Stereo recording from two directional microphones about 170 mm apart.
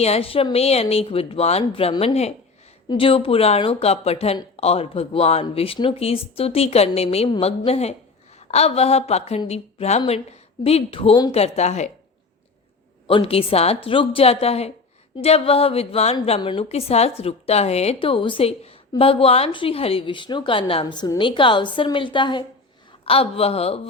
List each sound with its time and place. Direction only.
0.0 s a woman's voice: 35° left (ahead or behind)
13.1 s a woman's voice: 35° left (ahead or behind)